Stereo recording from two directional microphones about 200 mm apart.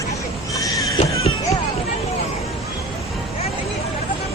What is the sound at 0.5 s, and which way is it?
Neigh, 15° left (ahead or behind).